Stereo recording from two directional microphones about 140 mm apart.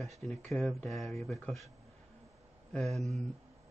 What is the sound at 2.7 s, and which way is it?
Speech, 5° left (ahead or behind).